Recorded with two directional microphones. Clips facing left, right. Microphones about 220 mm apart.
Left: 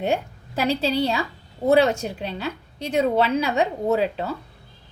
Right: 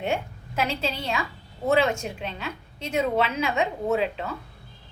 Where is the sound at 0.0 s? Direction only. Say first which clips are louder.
Left 4 dB; 35° left (ahead or behind).